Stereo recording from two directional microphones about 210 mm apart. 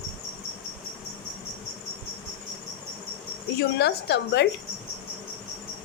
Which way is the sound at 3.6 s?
55° left (ahead or behind).